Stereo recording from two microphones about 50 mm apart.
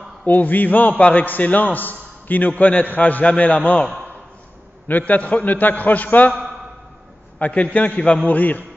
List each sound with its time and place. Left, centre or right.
0.2 s a man's voice: left
4.8 s a man's voice: left
7.3 s a man's voice: left
8.3 s a man's voice: left